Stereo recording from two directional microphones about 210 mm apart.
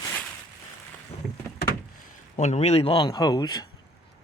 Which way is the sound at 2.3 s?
35° left (ahead or behind).